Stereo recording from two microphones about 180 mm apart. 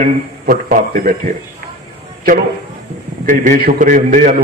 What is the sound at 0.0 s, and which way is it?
A man's voice, 50° right (ahead or behind).